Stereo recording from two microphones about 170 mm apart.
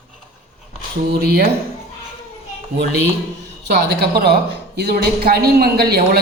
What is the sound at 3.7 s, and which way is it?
A woman's voice, 75° right (ahead or behind).